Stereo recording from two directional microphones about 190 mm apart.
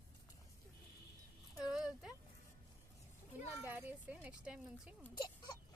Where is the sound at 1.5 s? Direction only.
5° right (ahead or behind).